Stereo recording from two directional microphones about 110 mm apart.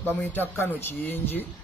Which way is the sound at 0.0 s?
20° left (ahead or behind).